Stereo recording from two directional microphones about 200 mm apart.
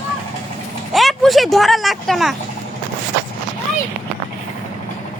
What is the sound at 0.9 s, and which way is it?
Speech, centre (ahead or behind).